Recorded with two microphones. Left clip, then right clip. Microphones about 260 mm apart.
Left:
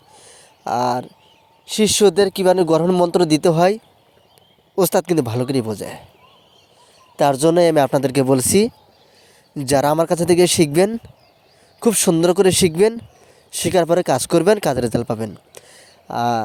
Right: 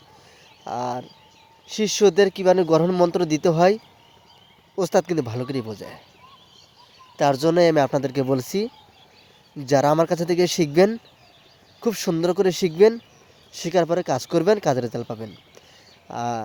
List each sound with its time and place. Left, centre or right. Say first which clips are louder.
0.3 s a sound: left 9 dB; left
1.6 s speech: left 4 dB; left
7.2 s speech: left 4 dB; left